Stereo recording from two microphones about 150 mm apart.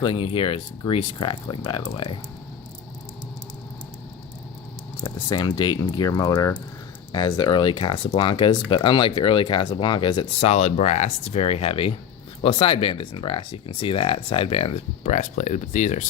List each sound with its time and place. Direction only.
0.0 s speech: 35° left (ahead or behind)
4.9 s speech: 30° left (ahead or behind); by 16.0 s 50° left (ahead or behind)